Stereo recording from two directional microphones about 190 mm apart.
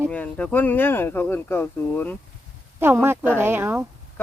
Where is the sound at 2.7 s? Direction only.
10° right (ahead or behind).